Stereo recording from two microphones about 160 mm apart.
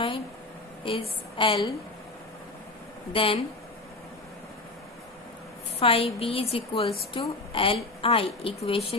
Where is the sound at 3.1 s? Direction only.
35° left (ahead or behind).